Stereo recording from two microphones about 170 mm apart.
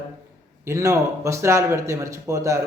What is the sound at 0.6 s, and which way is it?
A man's voice, 15° right (ahead or behind).